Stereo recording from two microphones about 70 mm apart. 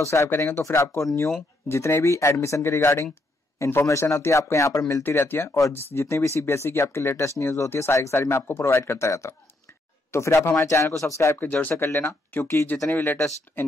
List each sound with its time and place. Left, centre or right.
0.0 s speech: left
5.0 s speech: left
11.3 s speech: left
11.7 s speech: left